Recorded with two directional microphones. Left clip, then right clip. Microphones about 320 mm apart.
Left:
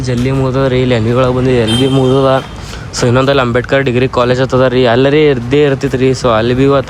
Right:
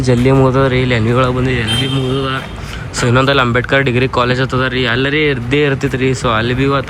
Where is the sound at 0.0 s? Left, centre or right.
Centre.